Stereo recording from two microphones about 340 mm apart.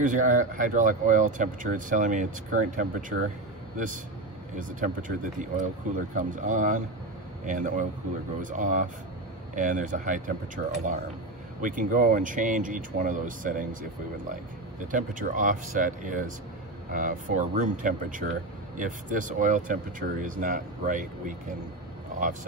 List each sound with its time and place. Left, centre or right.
0.0 s speech: right
4.6 s speech: right
14.9 s speech: right